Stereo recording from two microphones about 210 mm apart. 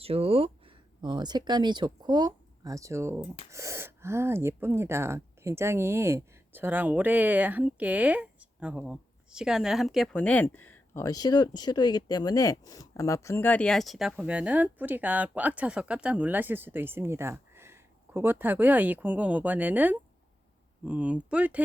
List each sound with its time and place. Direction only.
0.0 s speech: 30° right (ahead or behind); by 21.6 s 5° right (ahead or behind)